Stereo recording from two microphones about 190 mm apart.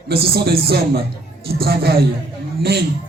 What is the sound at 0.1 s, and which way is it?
Speech, 55° right (ahead or behind).